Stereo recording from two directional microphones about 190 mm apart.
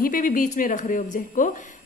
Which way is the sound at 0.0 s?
45° left (ahead or behind).